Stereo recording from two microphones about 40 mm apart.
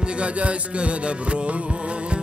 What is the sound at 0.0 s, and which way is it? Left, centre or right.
Music, right.